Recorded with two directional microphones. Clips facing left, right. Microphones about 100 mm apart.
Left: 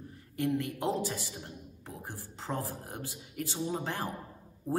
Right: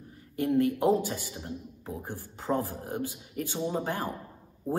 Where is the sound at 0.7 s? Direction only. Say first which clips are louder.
Right 7 dB; 20° right (ahead or behind).